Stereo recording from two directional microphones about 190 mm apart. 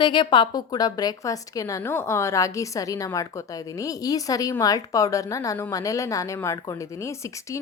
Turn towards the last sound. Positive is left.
turn(degrees=15)  # may be behind; listen again after turning